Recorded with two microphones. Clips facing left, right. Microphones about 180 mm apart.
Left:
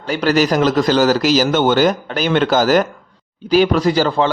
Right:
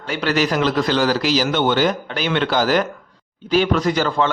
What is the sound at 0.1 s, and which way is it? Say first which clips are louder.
Speech: left 4 dB; 40° left (ahead or behind).